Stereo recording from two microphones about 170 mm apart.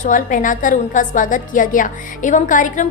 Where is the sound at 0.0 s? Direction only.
50° left (ahead or behind).